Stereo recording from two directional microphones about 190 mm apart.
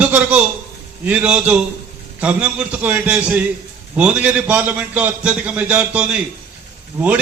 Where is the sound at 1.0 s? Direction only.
5° right (ahead or behind).